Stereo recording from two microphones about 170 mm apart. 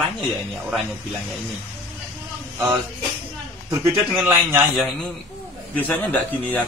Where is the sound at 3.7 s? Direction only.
10° right (ahead or behind).